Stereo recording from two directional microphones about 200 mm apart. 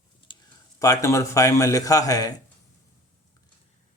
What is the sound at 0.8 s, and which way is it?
A man's voice, 15° left (ahead or behind).